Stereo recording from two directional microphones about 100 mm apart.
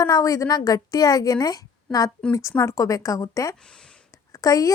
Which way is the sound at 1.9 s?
10° left (ahead or behind).